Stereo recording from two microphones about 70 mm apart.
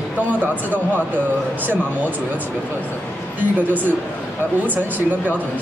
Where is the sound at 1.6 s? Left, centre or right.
Right.